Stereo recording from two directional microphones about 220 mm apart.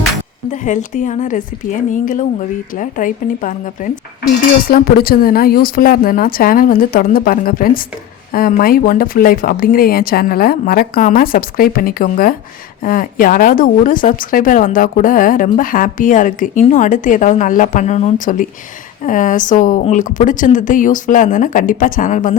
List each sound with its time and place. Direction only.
0.5 s speech: 35° left (ahead or behind)